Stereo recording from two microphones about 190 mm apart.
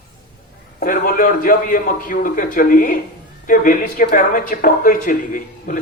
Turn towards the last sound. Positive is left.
turn(degrees=45)  # may be behind; listen again after turning